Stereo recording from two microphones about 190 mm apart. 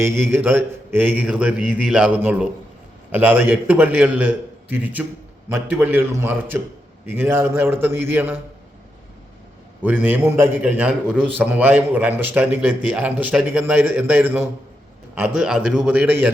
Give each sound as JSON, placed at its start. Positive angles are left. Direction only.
{"t": 0.0, "sound": "a man's voice", "side_deg": -10}
{"t": 9.8, "sound": "a man's voice", "side_deg": -10}